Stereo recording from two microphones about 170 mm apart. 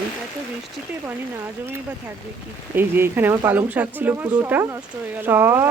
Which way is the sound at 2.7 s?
10° right (ahead or behind).